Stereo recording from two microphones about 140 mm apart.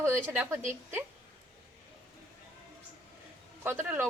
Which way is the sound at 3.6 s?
15° right (ahead or behind).